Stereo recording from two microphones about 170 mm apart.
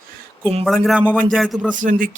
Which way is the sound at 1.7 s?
50° right (ahead or behind).